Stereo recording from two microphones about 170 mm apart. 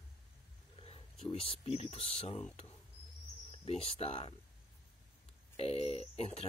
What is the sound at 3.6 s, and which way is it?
Speech, 35° left (ahead or behind).